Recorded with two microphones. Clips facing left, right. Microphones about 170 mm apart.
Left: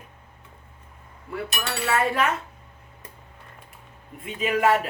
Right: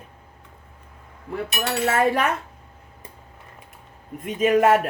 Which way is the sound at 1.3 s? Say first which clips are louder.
Right 4 dB; 45° right (ahead or behind).